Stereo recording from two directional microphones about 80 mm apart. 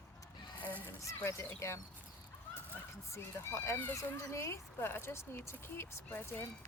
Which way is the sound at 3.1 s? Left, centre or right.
Left.